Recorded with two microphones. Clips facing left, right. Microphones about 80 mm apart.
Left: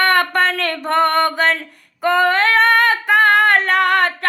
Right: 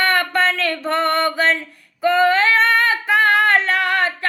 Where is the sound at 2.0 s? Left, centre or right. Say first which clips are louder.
Even; left.